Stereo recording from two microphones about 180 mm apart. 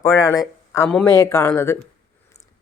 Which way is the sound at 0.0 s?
15° left (ahead or behind).